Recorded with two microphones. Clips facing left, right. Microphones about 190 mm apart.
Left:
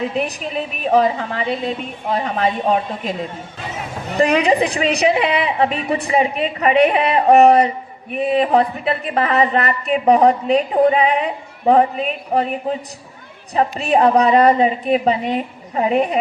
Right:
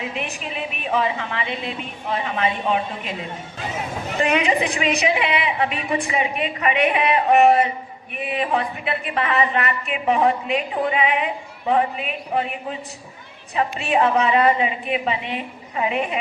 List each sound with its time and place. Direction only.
0.0 s speech: 35° left (ahead or behind)
4.2 s speech: 35° left (ahead or behind)